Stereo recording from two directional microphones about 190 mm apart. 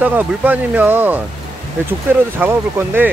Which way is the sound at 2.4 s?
10° right (ahead or behind).